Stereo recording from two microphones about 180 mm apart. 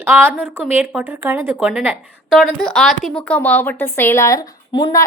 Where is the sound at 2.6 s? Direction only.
5° left (ahead or behind).